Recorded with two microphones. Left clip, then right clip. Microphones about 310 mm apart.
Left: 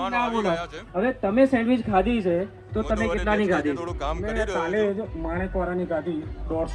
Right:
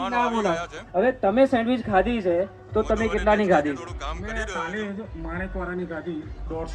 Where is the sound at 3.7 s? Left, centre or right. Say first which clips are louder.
Left 5 dB; centre.